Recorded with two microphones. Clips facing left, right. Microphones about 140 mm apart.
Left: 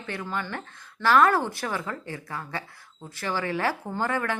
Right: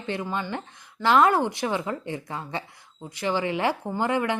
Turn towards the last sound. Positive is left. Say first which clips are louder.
# right 3 dB
turn(degrees=-20)  # may be behind; listen again after turning